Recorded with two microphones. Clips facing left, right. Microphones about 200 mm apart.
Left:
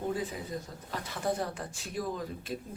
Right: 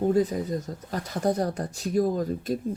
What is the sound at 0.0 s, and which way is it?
Speech, 40° right (ahead or behind).